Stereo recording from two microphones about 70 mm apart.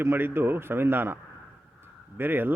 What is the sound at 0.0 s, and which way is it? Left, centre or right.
A man's voice, right.